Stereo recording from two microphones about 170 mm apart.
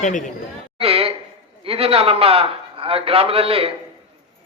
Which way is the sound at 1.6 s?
35° right (ahead or behind).